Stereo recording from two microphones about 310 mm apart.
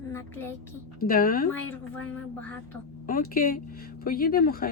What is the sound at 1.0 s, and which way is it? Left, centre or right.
Speech, left.